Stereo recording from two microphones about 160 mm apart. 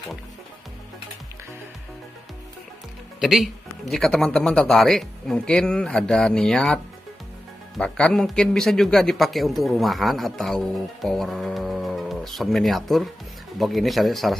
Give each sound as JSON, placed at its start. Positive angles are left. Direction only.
{"t": 3.2, "sound": "a man's voice", "side_deg": 0}